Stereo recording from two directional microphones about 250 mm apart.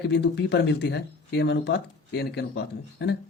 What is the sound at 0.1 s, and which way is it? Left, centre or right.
Speech, left.